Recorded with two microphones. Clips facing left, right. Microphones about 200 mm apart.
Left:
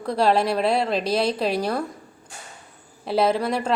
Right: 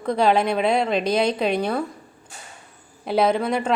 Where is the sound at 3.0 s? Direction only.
Centre (ahead or behind).